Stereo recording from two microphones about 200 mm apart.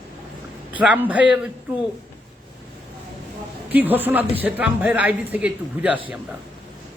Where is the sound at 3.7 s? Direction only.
10° right (ahead or behind).